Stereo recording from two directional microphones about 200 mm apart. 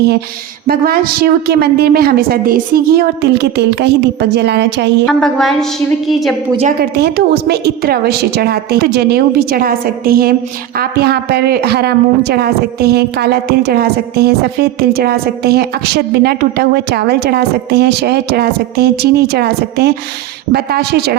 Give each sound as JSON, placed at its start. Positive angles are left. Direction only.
{"t": 0.7, "sound": "a woman's voice", "side_deg": -50}
{"t": 5.0, "sound": "a woman's voice", "side_deg": 0}
{"t": 6.9, "sound": "a woman's voice", "side_deg": -55}